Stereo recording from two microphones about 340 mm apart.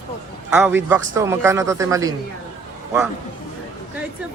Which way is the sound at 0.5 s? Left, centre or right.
Centre.